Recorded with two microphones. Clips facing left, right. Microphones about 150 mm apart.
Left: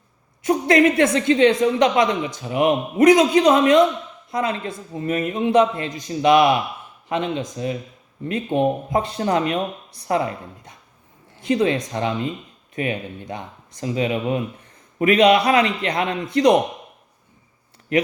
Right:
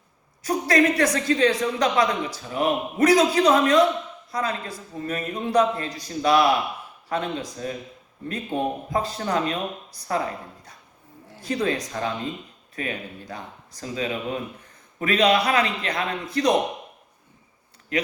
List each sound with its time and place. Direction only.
0.4 s a woman's voice: 25° left (ahead or behind)